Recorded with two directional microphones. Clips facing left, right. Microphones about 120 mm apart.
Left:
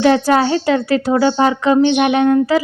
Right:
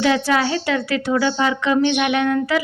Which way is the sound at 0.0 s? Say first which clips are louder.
Left 5 dB; 40° left (ahead or behind).